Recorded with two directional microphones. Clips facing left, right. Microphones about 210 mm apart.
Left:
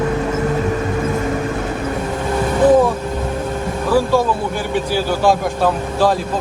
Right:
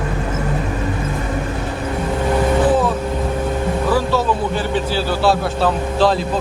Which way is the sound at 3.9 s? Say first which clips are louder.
Left 4 dB; 10° left (ahead or behind).